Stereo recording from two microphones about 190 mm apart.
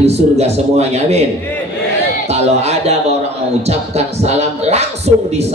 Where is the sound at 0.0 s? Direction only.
35° right (ahead or behind).